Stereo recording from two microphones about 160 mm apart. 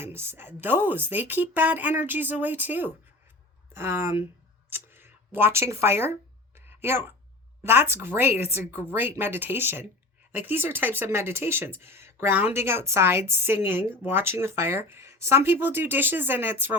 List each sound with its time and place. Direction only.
0.0 s speech: 15° right (ahead or behind)